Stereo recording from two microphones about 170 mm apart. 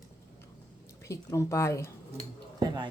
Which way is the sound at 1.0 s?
15° left (ahead or behind).